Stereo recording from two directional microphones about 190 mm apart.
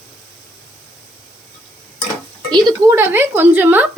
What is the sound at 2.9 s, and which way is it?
Speech, 10° right (ahead or behind).